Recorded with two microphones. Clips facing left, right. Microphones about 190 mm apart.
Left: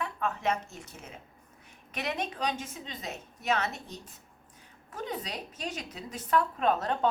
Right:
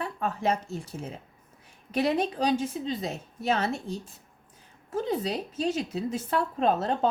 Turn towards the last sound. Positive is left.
turn(degrees=-30)  # may be behind; listen again after turning